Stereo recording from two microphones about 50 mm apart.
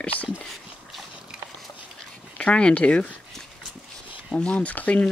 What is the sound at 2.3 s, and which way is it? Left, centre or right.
Speech, left.